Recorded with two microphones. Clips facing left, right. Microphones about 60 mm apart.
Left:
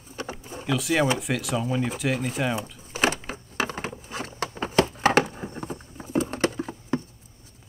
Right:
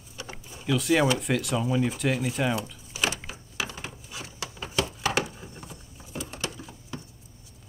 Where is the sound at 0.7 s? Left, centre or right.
Centre.